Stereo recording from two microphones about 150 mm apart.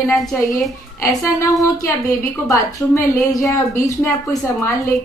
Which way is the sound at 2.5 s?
20° left (ahead or behind).